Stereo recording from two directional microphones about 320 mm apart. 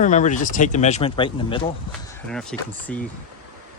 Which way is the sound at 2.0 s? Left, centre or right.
Centre.